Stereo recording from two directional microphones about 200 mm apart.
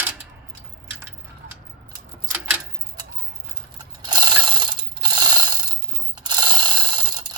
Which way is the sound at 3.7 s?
20° right (ahead or behind).